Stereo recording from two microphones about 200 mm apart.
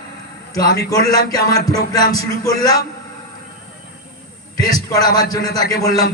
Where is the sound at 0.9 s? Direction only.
15° left (ahead or behind).